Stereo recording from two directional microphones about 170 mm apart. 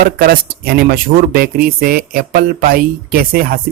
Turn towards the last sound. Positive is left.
turn(degrees=-60)  # may be behind; listen again after turning